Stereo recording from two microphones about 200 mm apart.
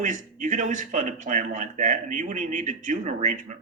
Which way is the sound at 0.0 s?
40° right (ahead or behind).